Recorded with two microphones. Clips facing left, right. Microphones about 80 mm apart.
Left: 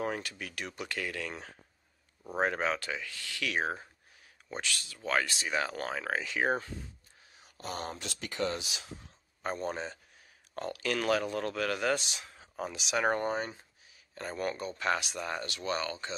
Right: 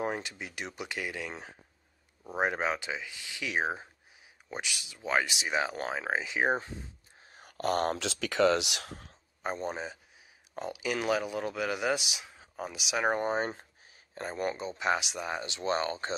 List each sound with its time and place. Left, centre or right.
0.0 s speech: right
7.2 s a sound: right
7.9 s speech: right
9.4 s speech: centre; by 16.2 s right